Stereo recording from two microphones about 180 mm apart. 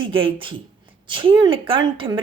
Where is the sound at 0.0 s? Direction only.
30° right (ahead or behind).